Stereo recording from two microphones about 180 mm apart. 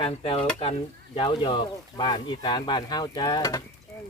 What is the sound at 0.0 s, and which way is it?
Speech, 30° left (ahead or behind).